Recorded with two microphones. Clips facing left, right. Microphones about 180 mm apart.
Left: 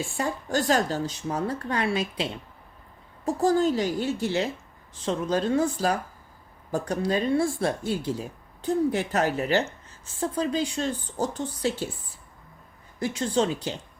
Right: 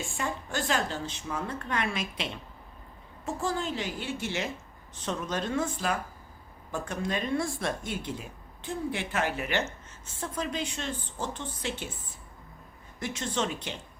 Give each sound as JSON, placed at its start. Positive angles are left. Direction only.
{"t": 0.0, "sound": "speech", "side_deg": 35}
{"t": 13.0, "sound": "speech", "side_deg": 30}